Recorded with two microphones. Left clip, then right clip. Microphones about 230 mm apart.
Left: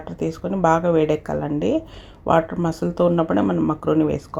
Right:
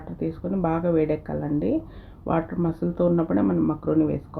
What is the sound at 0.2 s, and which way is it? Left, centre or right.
Speech, centre.